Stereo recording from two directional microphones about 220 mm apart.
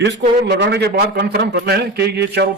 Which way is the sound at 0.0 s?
50° right (ahead or behind).